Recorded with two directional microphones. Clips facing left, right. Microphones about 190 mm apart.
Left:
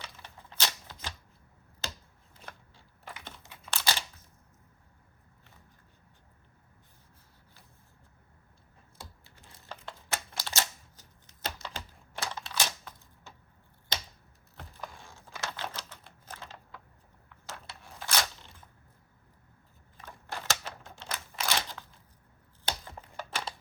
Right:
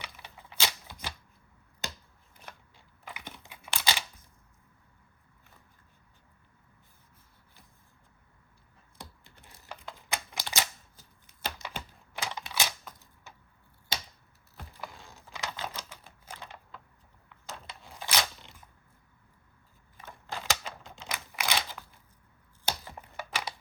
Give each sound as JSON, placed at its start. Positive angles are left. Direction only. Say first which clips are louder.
{"t": 0.0, "sound": "typewriter", "louder": "right 1 dB", "side_deg": -15}
{"t": 2.7, "sound": "a sound", "louder": "even", "side_deg": -15}
{"t": 9.0, "sound": "a sound", "louder": "right 2 dB", "side_deg": -15}
{"t": 11.4, "sound": "typing", "louder": "right 1 dB", "side_deg": -15}
{"t": 14.5, "sound": "computer keyboard", "louder": "even", "side_deg": -10}
{"t": 17.5, "sound": "scissors", "louder": "right 1 dB", "side_deg": -15}
{"t": 20.1, "sound": "typewriter", "louder": "right 1 dB", "side_deg": -15}